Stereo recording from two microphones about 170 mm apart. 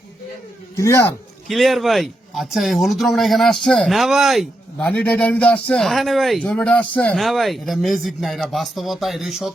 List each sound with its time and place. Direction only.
0.8 s speech: 15° left (ahead or behind)
1.5 s a man's voice: centre (ahead or behind)